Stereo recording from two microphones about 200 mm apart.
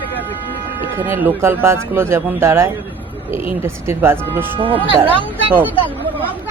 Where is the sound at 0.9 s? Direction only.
10° right (ahead or behind).